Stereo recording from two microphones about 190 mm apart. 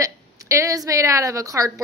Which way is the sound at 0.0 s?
15° right (ahead or behind).